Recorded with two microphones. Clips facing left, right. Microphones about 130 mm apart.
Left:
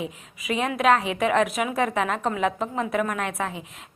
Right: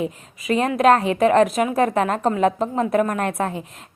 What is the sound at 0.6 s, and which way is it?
A woman's voice, 40° right (ahead or behind).